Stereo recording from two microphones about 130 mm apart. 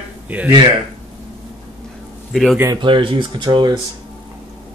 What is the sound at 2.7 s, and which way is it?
Speech, 40° right (ahead or behind).